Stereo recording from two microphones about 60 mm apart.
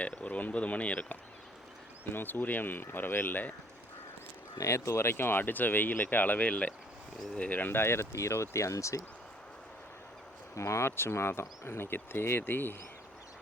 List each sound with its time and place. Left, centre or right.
0.0 s speech: left
2.0 s speech: left
4.6 s speech: left
10.5 s speech: left